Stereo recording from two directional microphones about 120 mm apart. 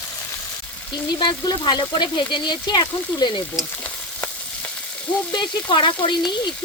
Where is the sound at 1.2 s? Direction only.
40° left (ahead or behind).